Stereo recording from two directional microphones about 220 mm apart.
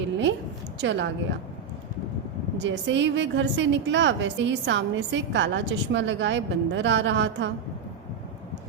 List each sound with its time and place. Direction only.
0.8 s a woman's voice: 55° right (ahead or behind)
2.6 s a woman's voice: 55° right (ahead or behind)